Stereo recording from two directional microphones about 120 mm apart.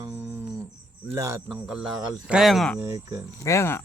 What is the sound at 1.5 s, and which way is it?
Speech, 5° right (ahead or behind).